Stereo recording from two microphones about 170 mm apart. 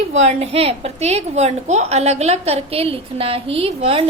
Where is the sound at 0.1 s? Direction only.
40° right (ahead or behind).